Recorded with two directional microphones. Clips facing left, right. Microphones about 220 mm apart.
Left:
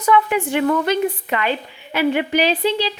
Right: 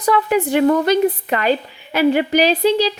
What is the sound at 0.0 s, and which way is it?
Speech, 40° right (ahead or behind).